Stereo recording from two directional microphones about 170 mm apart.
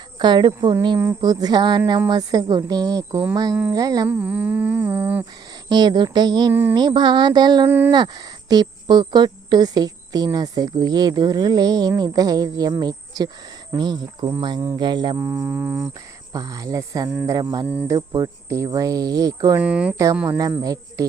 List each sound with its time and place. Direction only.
0.2 s speech: 25° right (ahead or behind)
3.7 s humming: 20° right (ahead or behind)
5.6 s speech: 25° right (ahead or behind)
6.5 s humming: 10° right (ahead or behind)
6.7 s speech: 25° right (ahead or behind)
15.2 s humming: 15° right (ahead or behind)
16.3 s speech: 20° right (ahead or behind)
17.7 s humming: 10° right (ahead or behind)
17.9 s speech: 20° right (ahead or behind)
19.5 s speech: 5° right (ahead or behind)
20.1 s humming: 10° right (ahead or behind)
20.6 s speech: 20° right (ahead or behind)